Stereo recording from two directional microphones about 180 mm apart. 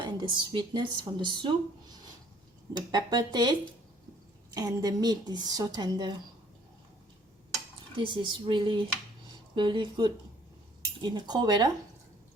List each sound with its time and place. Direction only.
0.0 s speech: 25° right (ahead or behind)
4.5 s speech: 20° right (ahead or behind)
7.5 s dishes: 25° right (ahead or behind)
9.6 s speech: 25° right (ahead or behind)